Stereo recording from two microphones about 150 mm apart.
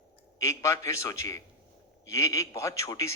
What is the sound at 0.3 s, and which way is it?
A man's voice, 20° left (ahead or behind).